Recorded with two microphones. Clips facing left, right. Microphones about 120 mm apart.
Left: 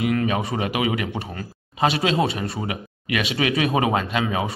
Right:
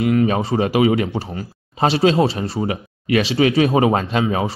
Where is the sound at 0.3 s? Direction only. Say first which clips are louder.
Right 6 dB; 30° right (ahead or behind).